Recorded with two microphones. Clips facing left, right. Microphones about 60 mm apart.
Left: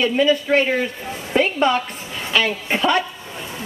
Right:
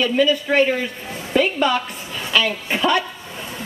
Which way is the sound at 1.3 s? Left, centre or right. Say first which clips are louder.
Even; left.